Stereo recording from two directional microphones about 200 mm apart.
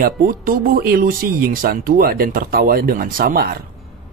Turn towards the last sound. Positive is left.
turn(degrees=-50)  # may be behind; listen again after turning